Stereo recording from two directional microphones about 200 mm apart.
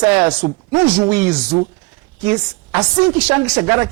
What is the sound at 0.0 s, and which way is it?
A man's voice, 10° right (ahead or behind).